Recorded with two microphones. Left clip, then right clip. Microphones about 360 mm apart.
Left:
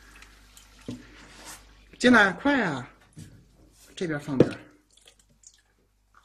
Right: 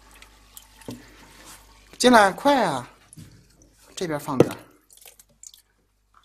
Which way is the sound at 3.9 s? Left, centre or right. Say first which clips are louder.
Right 3 dB; centre.